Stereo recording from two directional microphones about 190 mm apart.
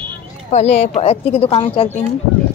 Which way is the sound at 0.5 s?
35° left (ahead or behind).